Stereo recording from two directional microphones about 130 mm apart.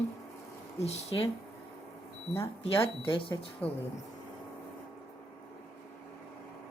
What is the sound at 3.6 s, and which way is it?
Speech, 10° left (ahead or behind).